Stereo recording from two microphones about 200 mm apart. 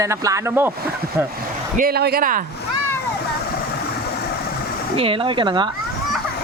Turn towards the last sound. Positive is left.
turn(degrees=-25)  # may be behind; listen again after turning